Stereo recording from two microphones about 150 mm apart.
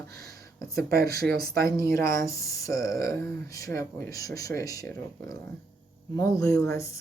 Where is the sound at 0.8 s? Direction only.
90° right.